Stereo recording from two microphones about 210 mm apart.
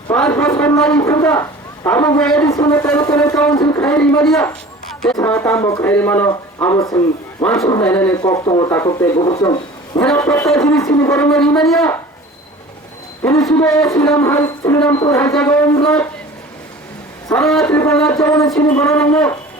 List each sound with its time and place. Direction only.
0.1 s a man's voice: 10° left (ahead or behind)
3.8 s speech: 5° left (ahead or behind)
5.1 s speech: 10° left (ahead or behind)
11.5 s speech: centre (ahead or behind)
13.4 s speech: 5° left (ahead or behind)
17.2 s speech: 5° left (ahead or behind)
17.9 s speech: 15° left (ahead or behind)